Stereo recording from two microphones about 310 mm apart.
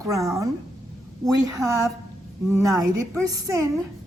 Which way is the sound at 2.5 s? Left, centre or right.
Centre.